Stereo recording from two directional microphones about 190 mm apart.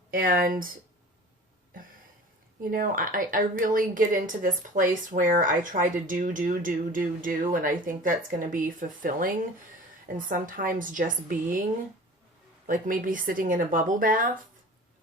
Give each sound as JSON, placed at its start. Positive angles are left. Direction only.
{"t": 0.1, "sound": "a woman's voice", "side_deg": -50}
{"t": 2.6, "sound": "a woman's voice", "side_deg": -45}
{"t": 12.6, "sound": "a woman's voice", "side_deg": -45}